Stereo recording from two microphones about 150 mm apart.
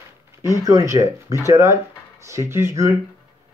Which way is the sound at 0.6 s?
20° right (ahead or behind).